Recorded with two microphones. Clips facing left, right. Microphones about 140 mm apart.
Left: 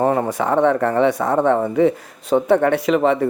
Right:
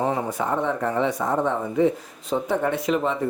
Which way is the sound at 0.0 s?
60° left (ahead or behind).